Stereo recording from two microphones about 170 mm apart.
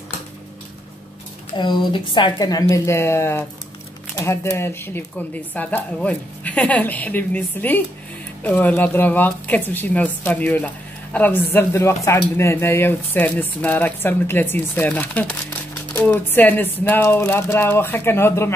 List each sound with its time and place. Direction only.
1.5 s a woman's voice: 25° left (ahead or behind)